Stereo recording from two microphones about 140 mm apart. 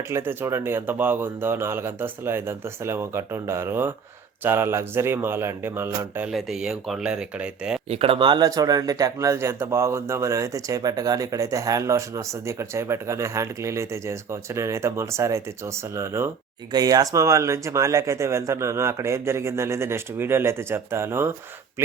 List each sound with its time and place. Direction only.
0.1 s speech: 15° right (ahead or behind)
6.3 s speech: 5° right (ahead or behind)
7.9 s speech: 45° right (ahead or behind); by 21.3 s 15° right (ahead or behind)